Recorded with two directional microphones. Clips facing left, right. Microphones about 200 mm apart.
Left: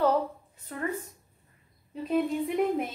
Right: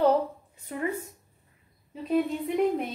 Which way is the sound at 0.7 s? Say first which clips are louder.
Right 3 dB; 15° right (ahead or behind).